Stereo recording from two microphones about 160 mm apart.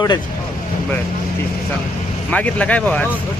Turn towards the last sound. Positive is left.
turn(degrees=10)  # may be behind; listen again after turning